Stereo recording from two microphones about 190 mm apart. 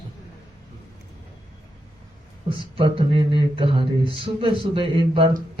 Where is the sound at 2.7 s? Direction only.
30° right (ahead or behind).